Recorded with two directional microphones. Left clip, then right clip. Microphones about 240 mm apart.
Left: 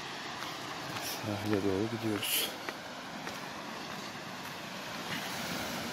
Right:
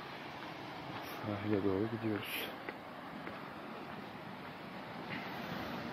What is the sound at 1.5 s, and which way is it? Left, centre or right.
Speech, centre.